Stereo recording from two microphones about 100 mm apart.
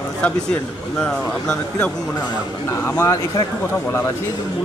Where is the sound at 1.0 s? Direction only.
5° left (ahead or behind).